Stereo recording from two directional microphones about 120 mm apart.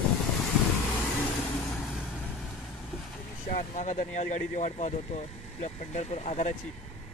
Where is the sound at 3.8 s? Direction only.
90° left.